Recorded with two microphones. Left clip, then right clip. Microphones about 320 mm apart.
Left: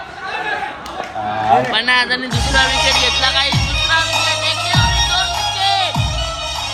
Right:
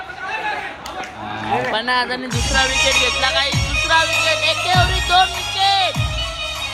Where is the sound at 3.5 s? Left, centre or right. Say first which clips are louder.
Left 1 dB; left.